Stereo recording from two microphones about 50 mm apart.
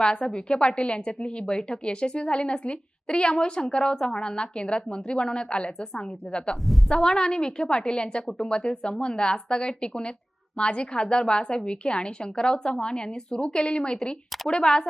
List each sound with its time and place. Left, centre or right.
0.0 s a woman's voice: centre